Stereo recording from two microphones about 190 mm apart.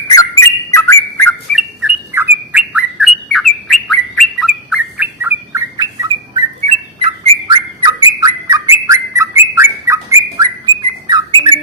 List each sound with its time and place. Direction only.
0.1 s bird: 15° left (ahead or behind)
1.5 s bird: 5° right (ahead or behind); by 11.6 s 25° right (ahead or behind)